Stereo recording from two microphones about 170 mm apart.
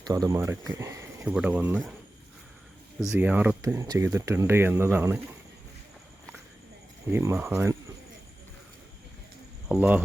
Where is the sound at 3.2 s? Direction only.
10° right (ahead or behind).